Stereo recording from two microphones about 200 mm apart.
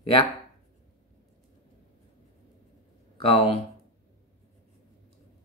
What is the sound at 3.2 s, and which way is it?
Speech, 30° left (ahead or behind).